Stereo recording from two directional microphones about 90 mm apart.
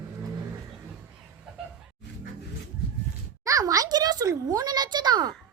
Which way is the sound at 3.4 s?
40° right (ahead or behind).